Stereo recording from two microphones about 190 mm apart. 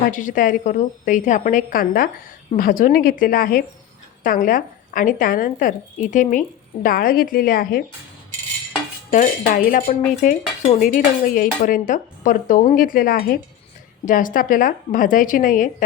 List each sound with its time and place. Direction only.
0.1 s cutlery: 45° left (ahead or behind)
9.1 s cutlery: 45° left (ahead or behind)